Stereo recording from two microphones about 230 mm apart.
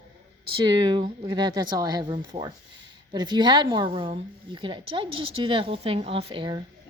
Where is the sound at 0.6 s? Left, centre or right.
Centre.